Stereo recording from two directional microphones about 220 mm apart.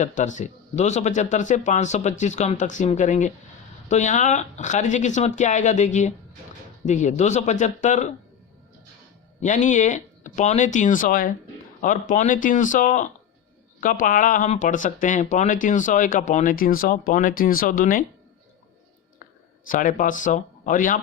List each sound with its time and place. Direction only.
0.0 s speech: 35° left (ahead or behind)
9.4 s speech: 35° left (ahead or behind)
19.6 s speech: 40° left (ahead or behind)